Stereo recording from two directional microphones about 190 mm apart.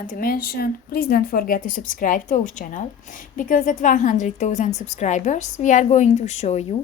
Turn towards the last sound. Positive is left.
turn(degrees=35)  # may be behind; listen again after turning